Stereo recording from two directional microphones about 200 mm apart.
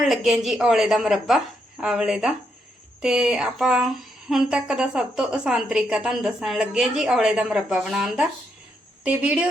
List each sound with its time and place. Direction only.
0.0 s a woman's voice: centre (ahead or behind)